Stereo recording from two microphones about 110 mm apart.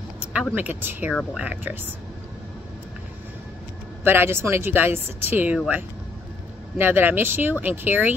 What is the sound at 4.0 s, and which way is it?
Speech, 20° right (ahead or behind).